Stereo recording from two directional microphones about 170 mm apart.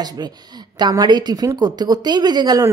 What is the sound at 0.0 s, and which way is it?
Speech, 25° right (ahead or behind).